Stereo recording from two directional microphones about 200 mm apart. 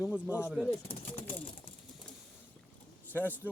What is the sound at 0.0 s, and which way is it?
Speech, 5° right (ahead or behind).